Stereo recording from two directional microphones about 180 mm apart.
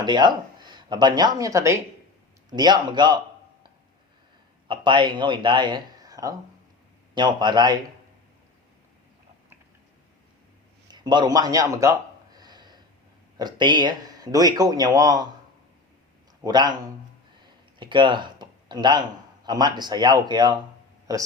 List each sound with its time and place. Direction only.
0.0 s a woman's voice: 25° right (ahead or behind)
4.7 s speech: 25° right (ahead or behind)
10.9 s a sound: 25° right (ahead or behind)
13.3 s speech: 25° right (ahead or behind)
16.4 s speech: 25° right (ahead or behind)
17.7 s speech: 25° right (ahead or behind)